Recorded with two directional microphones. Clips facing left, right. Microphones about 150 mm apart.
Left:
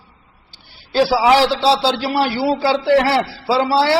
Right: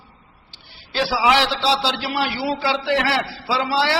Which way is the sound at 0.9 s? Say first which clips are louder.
Left 5 dB; 40° left (ahead or behind).